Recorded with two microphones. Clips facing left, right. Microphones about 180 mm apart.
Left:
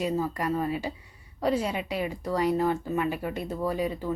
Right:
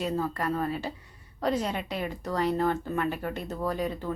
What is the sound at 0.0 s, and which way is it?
Speech, 10° left (ahead or behind).